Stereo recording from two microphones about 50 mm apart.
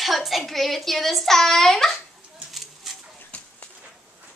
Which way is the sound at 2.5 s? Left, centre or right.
Centre.